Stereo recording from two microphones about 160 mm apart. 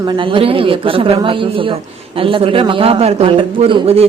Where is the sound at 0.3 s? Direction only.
35° right (ahead or behind).